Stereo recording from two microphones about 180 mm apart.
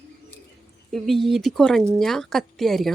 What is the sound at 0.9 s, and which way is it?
Speech, centre (ahead or behind).